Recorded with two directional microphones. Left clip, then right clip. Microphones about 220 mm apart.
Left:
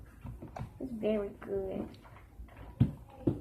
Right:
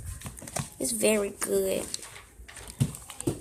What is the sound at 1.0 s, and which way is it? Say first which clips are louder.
Speech: right 8 dB; 45° right (ahead or behind).